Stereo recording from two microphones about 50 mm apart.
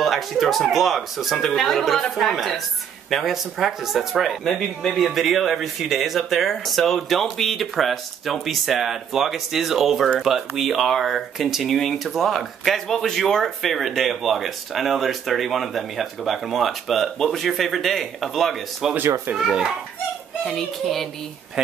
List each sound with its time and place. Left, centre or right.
0.0 s a child's voice: centre
20.4 s speech: centre